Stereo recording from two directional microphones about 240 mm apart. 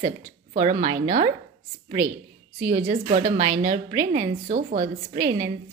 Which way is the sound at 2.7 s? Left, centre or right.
Right.